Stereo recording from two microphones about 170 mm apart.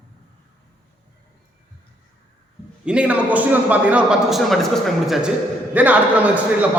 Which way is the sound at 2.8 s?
5° right (ahead or behind).